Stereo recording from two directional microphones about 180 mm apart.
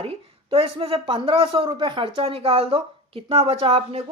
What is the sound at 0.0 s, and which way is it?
A woman's voice, 35° right (ahead or behind).